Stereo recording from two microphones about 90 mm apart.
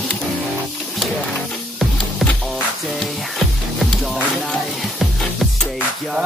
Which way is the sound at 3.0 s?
5° left (ahead or behind).